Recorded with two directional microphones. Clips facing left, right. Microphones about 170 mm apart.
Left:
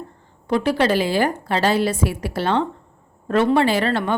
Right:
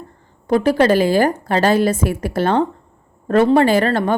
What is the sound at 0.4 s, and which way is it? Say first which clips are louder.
A woman's voice: right 5 dB; 45° right (ahead or behind).